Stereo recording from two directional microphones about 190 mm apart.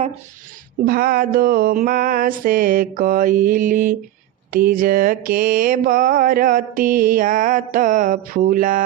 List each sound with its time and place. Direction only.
0.9 s mantra: 50° right (ahead or behind)